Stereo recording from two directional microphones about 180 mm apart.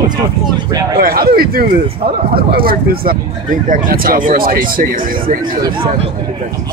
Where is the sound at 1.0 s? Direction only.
60° right (ahead or behind).